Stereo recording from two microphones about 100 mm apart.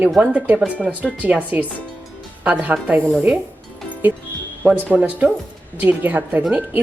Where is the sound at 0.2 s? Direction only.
15° right (ahead or behind).